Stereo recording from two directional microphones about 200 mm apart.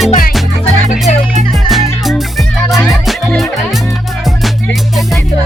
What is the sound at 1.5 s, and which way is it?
Music, centre (ahead or behind).